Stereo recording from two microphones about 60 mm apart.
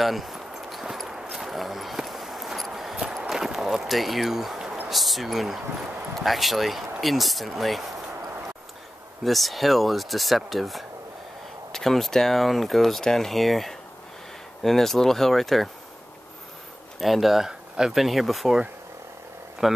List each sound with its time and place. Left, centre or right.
0.0 s a sound: centre
4.8 s speech: centre
9.2 s speech: centre
17.0 s speech: centre
19.6 s speech: centre